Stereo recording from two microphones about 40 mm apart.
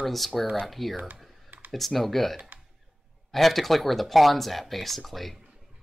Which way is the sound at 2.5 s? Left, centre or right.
Right.